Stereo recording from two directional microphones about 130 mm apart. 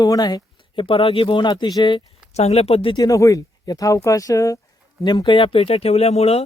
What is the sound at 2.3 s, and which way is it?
Speech, 55° left (ahead or behind).